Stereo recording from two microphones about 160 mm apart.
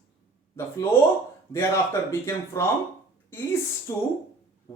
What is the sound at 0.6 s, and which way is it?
Speech, 15° left (ahead or behind).